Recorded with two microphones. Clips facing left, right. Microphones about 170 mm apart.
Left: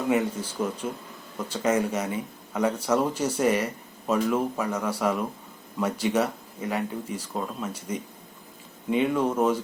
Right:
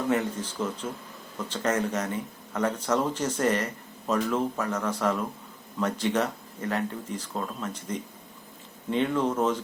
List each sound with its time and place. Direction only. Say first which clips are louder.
0.1 s speech: left 2 dB; 10° left (ahead or behind)